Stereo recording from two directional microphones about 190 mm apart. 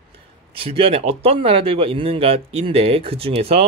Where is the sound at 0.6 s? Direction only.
30° right (ahead or behind).